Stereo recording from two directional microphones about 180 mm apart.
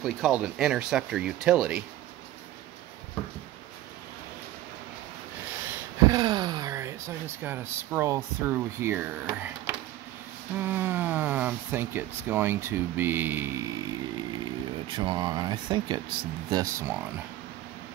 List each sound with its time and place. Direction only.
0.0 s speech: centre (ahead or behind)
6.0 s speech: 25° right (ahead or behind)
14.4 s speech: 25° right (ahead or behind)